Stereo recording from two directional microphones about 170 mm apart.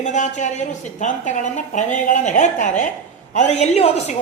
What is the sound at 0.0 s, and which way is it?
A woman's voice, 45° left (ahead or behind).